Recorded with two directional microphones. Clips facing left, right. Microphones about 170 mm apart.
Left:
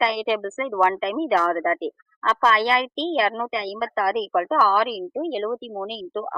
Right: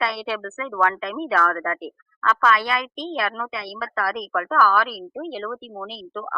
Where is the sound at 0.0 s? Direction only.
20° left (ahead or behind).